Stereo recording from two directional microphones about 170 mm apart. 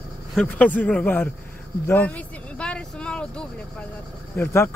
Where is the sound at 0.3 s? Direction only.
5° left (ahead or behind).